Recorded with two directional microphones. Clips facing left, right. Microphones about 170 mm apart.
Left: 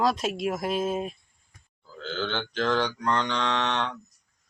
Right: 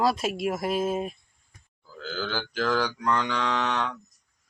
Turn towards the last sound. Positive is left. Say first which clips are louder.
# even
turn(degrees=25)  # may be behind; listen again after turning